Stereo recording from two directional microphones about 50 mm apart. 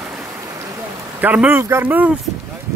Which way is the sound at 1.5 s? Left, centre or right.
Right.